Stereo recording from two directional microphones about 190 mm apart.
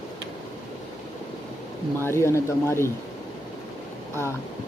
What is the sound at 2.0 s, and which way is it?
Speech, 15° left (ahead or behind).